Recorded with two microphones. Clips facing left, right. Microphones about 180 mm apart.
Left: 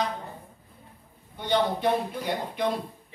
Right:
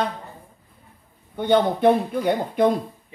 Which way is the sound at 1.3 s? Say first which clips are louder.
Right 6 dB; 55° right (ahead or behind).